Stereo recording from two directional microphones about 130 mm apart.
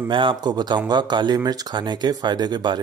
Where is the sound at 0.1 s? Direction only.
40° right (ahead or behind).